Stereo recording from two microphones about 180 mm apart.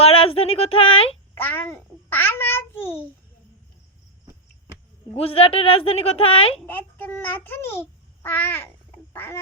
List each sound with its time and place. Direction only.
0.0 s speech: 30° left (ahead or behind)
1.4 s child singing: 10° left (ahead or behind)
5.1 s a woman's voice: 30° left (ahead or behind)
6.6 s child singing: 10° left (ahead or behind)